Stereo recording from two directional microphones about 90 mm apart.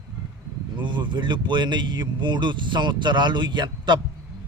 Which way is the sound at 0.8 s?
60° right (ahead or behind).